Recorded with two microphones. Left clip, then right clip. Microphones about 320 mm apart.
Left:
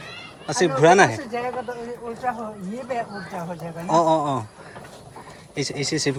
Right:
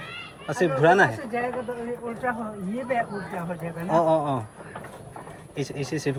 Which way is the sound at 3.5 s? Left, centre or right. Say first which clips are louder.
Left 3 dB; centre.